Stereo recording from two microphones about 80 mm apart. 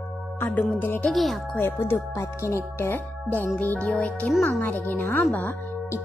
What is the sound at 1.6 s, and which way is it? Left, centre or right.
Speech, left.